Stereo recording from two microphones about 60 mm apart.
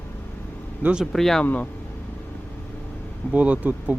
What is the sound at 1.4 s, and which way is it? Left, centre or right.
Speech, left.